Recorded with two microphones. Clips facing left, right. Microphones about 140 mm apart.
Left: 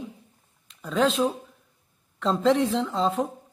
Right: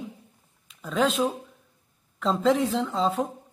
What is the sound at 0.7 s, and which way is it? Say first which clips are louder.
Speech: left 1 dB; centre (ahead or behind).